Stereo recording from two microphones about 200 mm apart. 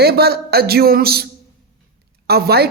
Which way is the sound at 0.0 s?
50° right (ahead or behind).